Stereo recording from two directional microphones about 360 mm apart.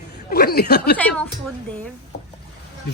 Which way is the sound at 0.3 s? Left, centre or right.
Left.